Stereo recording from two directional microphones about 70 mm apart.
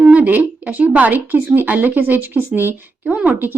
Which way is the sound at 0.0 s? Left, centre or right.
Right.